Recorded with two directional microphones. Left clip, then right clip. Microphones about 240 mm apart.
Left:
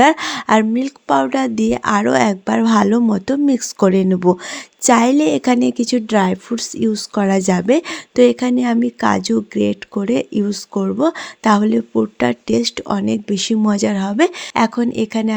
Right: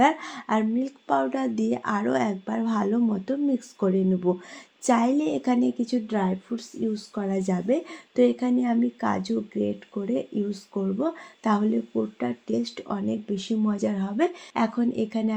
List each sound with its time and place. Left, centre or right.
0.0 s a woman's voice: left